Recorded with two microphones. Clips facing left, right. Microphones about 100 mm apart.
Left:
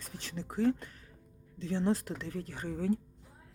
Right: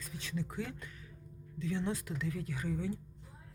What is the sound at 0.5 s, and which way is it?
Speech, 35° left (ahead or behind).